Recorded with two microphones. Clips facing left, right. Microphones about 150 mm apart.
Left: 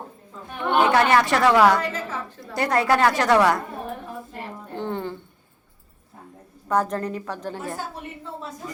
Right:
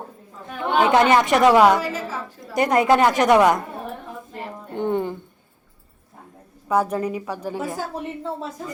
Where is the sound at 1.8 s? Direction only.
10° right (ahead or behind).